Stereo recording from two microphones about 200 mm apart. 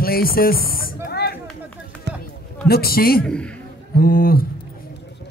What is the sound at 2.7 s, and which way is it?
Speech, 50° left (ahead or behind).